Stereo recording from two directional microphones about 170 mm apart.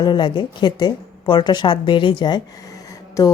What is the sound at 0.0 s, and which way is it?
A woman's voice, 25° left (ahead or behind).